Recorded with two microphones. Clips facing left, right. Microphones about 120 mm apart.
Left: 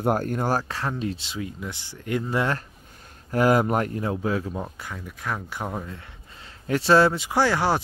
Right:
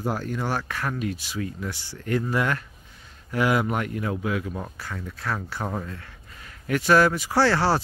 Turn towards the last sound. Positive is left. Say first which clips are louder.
# right 1 dB
turn(degrees=15)  # may be behind; listen again after turning